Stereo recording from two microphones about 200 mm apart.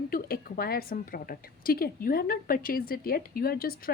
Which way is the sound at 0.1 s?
50° left (ahead or behind).